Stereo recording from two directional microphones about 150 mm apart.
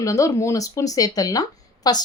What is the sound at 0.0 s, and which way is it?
A woman's voice, 20° left (ahead or behind).